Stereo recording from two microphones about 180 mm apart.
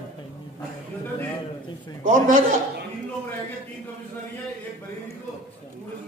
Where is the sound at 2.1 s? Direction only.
45° right (ahead or behind).